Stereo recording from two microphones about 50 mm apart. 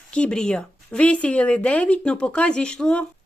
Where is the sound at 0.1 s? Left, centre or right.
Centre.